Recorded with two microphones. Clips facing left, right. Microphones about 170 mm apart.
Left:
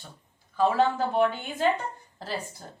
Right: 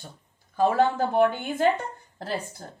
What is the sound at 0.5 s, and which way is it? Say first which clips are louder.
A woman's voice: right 2 dB; 50° right (ahead or behind).